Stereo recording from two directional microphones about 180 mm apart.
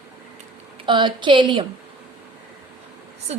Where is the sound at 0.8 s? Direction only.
25° right (ahead or behind).